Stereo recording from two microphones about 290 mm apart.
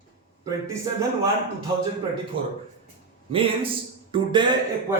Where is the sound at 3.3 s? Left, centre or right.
Centre.